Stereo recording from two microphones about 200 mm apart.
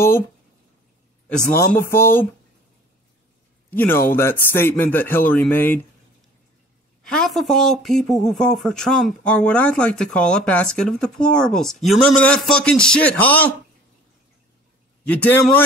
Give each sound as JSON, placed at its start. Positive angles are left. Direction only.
{"t": 1.5, "sound": "speech", "side_deg": 10}
{"t": 3.7, "sound": "speech", "side_deg": 10}
{"t": 7.0, "sound": "speech", "side_deg": 5}
{"t": 15.0, "sound": "speech", "side_deg": 5}